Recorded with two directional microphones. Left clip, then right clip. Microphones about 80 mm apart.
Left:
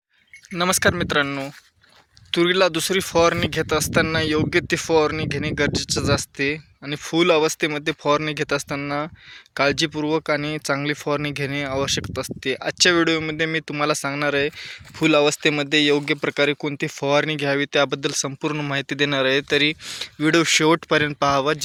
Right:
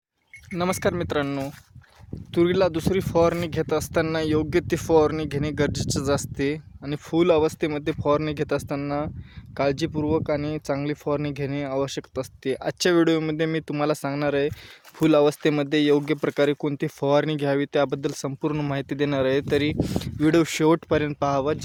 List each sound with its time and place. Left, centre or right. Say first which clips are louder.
0.5 s speech: left 5 dB; centre
2.5 s speech: left 3 dB; centre
9.6 s speech: left 4 dB; centre
12.5 s speech: left 4 dB; right
19.8 s speech: right 2 dB; right
20.2 s speech: left 3 dB; right
21.0 s speech: left 4 dB; centre